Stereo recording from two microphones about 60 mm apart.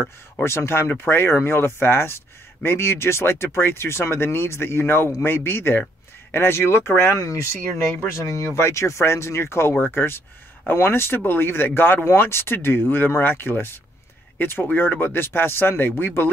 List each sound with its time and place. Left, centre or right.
0.4 s speech: left
8.5 s speech: left